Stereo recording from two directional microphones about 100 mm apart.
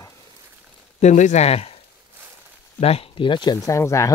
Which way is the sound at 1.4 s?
90° left.